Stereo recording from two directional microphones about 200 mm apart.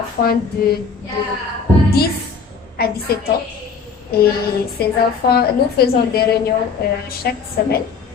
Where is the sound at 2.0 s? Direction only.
50° left (ahead or behind).